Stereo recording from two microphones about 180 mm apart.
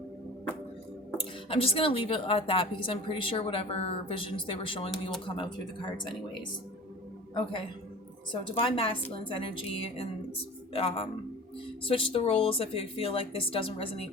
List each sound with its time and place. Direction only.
1.1 s a woman's voice: 30° left (ahead or behind)
8.3 s a woman's voice: 30° left (ahead or behind)